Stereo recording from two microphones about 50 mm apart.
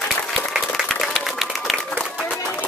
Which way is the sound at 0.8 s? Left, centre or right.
Centre.